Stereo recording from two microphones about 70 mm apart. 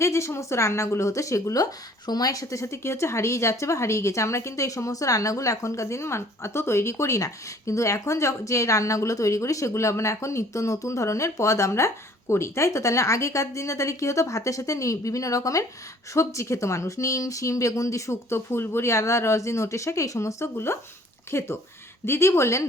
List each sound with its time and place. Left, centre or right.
0.0 s a woman's voice: left
2.0 s a woman's voice: left